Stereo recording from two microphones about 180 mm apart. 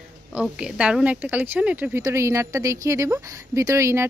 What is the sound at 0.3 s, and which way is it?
Speech, 5° right (ahead or behind).